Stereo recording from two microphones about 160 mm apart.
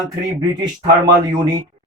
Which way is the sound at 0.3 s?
30° right (ahead or behind).